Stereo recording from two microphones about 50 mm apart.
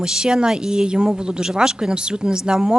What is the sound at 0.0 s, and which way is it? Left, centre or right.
Speech, centre.